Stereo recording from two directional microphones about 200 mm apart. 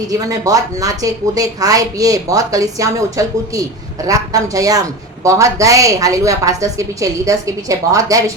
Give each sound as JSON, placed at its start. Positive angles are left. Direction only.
{"t": 0.1, "sound": "a woman's voice", "side_deg": -20}